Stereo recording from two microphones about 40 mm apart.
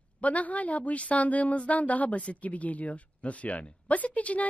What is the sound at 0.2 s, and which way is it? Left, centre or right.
A woman's voice, left.